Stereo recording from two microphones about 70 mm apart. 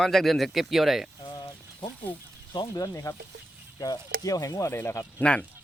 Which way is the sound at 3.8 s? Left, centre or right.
Left.